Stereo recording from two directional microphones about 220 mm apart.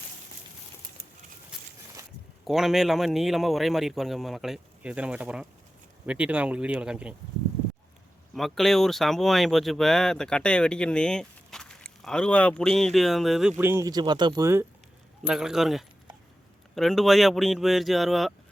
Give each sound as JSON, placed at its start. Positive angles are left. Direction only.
{"t": 1.5, "sound": "walk", "side_deg": -5}
{"t": 2.0, "sound": "a sound", "side_deg": -15}
{"t": 2.4, "sound": "speech", "side_deg": 0}
{"t": 8.4, "sound": "speech", "side_deg": 0}
{"t": 13.6, "sound": "speech", "side_deg": -10}